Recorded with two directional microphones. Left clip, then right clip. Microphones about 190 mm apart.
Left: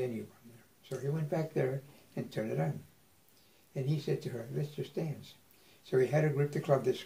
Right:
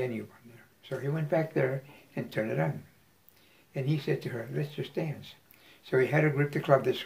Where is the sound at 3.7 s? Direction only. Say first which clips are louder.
Right 4 dB; 10° left (ahead or behind).